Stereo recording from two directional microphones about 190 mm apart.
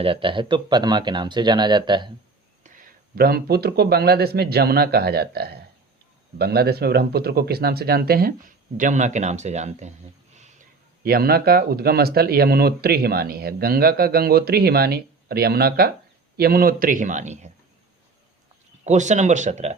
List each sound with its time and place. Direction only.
0.0 s speech: 30° right (ahead or behind)
2.6 s speech: 45° right (ahead or behind)
11.0 s speech: 55° right (ahead or behind); by 17.5 s 35° right (ahead or behind)
18.9 s speech: 40° right (ahead or behind)